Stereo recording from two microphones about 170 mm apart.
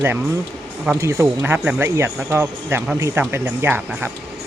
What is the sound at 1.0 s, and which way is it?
Speech, 15° right (ahead or behind).